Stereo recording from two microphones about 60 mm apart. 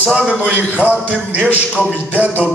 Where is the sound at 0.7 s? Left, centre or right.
Right.